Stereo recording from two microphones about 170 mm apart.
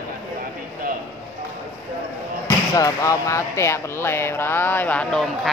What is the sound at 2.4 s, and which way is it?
Speech, 20° left (ahead or behind).